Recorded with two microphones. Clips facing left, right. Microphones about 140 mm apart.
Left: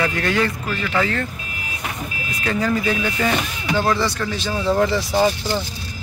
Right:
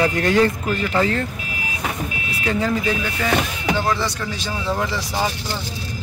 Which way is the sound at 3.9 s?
15° right (ahead or behind).